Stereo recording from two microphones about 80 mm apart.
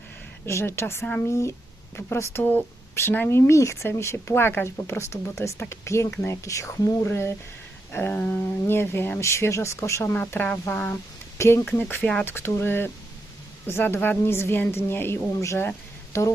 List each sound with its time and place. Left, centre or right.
0.4 s speech: left
2.1 s speech: left
10.1 s speech: left